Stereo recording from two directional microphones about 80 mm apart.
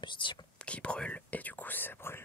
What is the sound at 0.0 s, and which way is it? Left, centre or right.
Speech, left.